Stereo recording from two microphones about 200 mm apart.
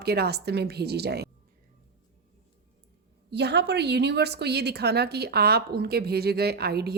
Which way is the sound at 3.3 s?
55° right (ahead or behind).